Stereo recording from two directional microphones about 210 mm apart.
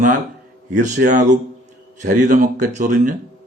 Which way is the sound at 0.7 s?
35° right (ahead or behind).